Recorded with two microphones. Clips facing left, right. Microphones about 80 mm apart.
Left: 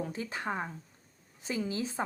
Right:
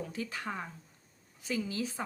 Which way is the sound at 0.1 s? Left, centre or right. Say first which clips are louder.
Left 3 dB; left.